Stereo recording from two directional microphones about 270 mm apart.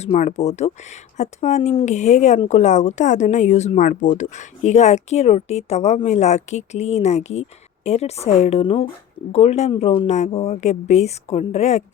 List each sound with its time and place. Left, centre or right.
0.0 s speech: left